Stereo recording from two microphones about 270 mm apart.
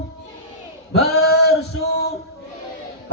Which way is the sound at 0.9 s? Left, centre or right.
Left.